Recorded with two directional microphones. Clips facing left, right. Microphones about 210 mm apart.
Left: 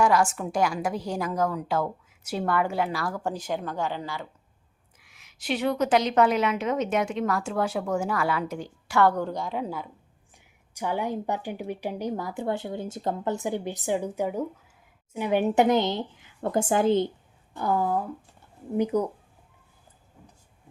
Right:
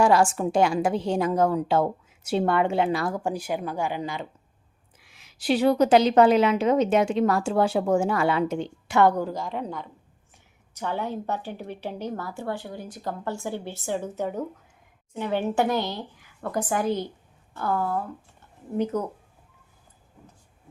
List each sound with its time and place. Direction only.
0.0 s a woman's voice: 30° right (ahead or behind)
3.2 s speech: 10° right (ahead or behind)
4.9 s a woman's voice: 30° right (ahead or behind)
9.2 s a woman's voice: centre (ahead or behind)